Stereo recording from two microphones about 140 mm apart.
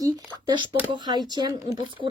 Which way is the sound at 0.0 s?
35° right (ahead or behind).